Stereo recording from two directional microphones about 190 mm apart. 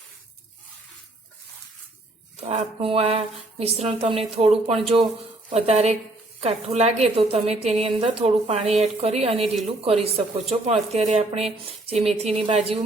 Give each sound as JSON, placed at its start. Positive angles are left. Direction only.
{"t": 2.4, "sound": "a woman's voice", "side_deg": -35}